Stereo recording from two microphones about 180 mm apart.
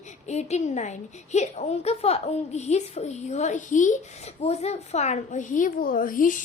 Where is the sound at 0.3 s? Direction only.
40° left (ahead or behind).